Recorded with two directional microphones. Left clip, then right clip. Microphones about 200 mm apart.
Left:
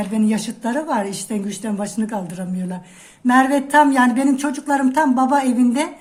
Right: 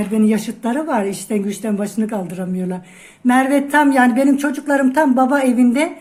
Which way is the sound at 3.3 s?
Centre (ahead or behind).